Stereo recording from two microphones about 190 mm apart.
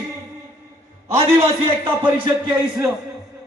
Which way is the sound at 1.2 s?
25° right (ahead or behind).